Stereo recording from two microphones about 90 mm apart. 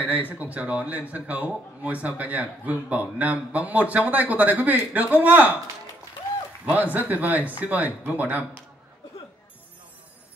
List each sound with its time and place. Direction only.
0.3 s speech: 15° right (ahead or behind)
6.6 s speech: 20° right (ahead or behind)